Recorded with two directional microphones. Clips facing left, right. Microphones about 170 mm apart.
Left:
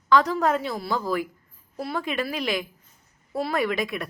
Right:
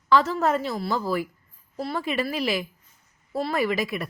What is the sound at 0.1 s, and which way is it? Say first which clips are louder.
A woman's voice: even; 5° right (ahead or behind).